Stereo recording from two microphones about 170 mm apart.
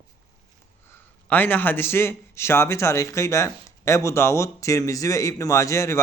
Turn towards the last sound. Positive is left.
turn(degrees=15)  # may be behind; listen again after turning